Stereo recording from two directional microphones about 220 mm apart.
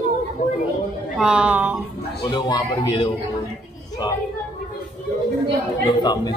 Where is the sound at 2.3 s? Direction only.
20° left (ahead or behind).